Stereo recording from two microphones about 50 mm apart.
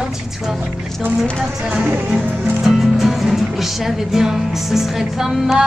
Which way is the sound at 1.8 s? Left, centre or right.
Right.